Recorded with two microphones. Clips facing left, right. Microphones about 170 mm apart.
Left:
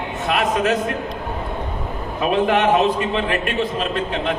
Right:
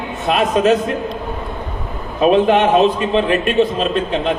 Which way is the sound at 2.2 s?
25° right (ahead or behind).